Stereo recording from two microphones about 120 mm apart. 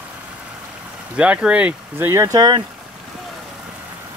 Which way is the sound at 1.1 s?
10° right (ahead or behind).